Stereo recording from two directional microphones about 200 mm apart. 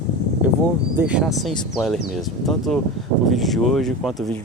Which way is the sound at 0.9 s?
5° right (ahead or behind).